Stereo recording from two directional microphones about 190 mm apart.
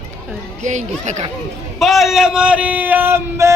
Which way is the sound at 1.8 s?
Centre (ahead or behind).